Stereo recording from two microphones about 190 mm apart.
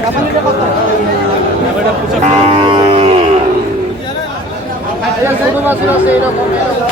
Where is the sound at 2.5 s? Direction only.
30° right (ahead or behind).